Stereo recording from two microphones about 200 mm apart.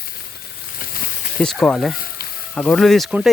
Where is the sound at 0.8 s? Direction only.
45° left (ahead or behind).